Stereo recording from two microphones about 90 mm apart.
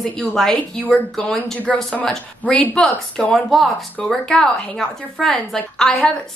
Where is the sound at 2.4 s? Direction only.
15° left (ahead or behind).